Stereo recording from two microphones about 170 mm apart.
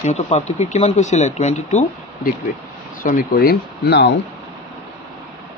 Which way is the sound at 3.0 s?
55° left (ahead or behind).